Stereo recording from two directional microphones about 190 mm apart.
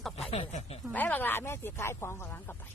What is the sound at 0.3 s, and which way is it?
Speech, 30° left (ahead or behind).